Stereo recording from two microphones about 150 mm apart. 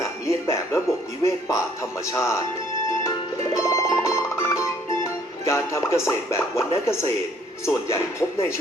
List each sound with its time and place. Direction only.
0.0 s music: 20° left (ahead or behind)
2.1 s speech: 20° left (ahead or behind)
3.6 s music: 20° left (ahead or behind)
5.5 s speech: 20° left (ahead or behind)